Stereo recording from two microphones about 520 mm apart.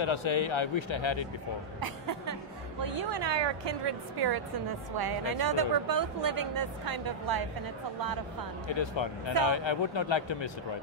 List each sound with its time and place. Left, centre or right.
0.0 s a man's voice: left
1.8 s music: right
2.8 s a woman's voice: right
8.6 s a man's voice: left